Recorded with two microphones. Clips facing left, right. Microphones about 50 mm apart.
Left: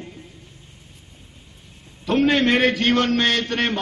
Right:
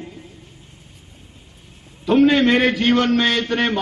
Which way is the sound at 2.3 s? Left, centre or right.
Centre.